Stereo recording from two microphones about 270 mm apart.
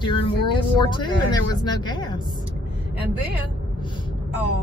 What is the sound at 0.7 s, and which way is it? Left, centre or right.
Speech, centre.